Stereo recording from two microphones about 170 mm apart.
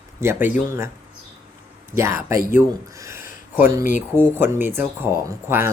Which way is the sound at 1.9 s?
15° right (ahead or behind).